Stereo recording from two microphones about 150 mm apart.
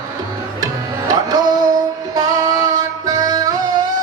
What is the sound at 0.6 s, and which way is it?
Music, 25° right (ahead or behind).